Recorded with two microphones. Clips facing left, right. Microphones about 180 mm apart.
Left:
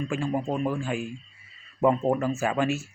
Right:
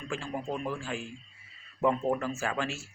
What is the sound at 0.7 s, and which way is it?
Speech, 15° left (ahead or behind).